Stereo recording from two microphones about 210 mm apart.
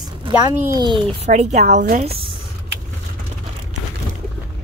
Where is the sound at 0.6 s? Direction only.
15° right (ahead or behind).